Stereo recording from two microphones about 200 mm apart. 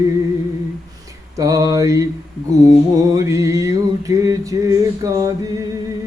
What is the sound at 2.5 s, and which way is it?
Music, 15° right (ahead or behind).